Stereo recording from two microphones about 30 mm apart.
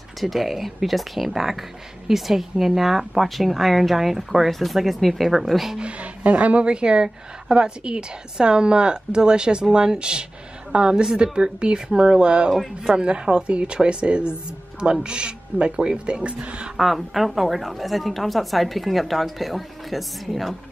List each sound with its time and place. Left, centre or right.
0.2 s a woman's voice: centre
5.8 s a woman's voice: right
16.2 s a woman's voice: right
16.7 s a woman's voice: centre